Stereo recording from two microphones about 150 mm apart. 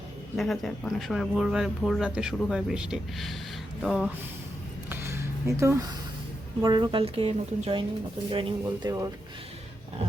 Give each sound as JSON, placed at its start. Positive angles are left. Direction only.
{"t": 0.3, "sound": "speech", "side_deg": 0}
{"t": 4.9, "sound": "a sound", "side_deg": -15}
{"t": 6.6, "sound": "a woman's voice", "side_deg": -30}
{"t": 8.6, "sound": "speech", "side_deg": -25}